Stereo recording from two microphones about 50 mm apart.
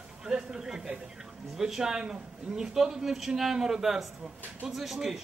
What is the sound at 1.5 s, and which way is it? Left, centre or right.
A man's voice, centre.